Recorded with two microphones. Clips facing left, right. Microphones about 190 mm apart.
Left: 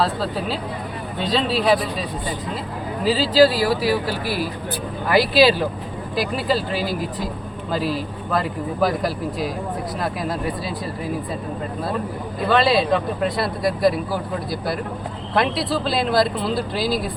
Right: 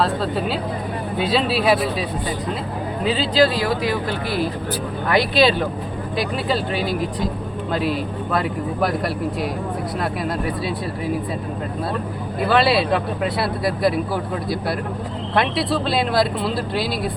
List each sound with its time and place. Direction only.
0.0 s speech: centre (ahead or behind)
12.5 s speech: 5° right (ahead or behind)